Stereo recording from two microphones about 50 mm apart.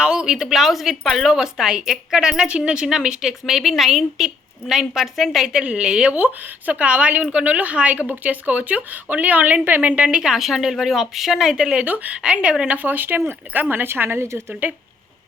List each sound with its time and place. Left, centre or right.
0.0 s a sound: centre
0.4 s a woman's voice: centre
5.6 s speech: right
6.1 s speech: right
9.9 s a woman's voice: right
12.2 s speech: right
12.7 s speech: right
13.8 s a woman's voice: right
14.6 s speech: right